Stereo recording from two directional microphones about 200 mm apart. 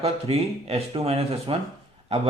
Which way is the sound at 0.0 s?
30° right (ahead or behind).